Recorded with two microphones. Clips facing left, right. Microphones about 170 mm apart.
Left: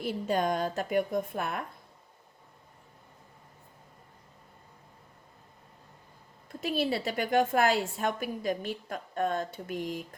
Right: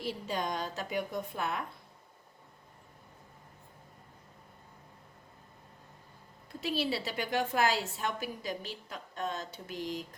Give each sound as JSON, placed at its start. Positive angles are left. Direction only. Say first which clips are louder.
{"t": 0.0, "sound": "a woman's voice", "louder": "left 6 dB", "side_deg": 55}
{"t": 6.6, "sound": "a woman's voice", "louder": "left 3 dB", "side_deg": 50}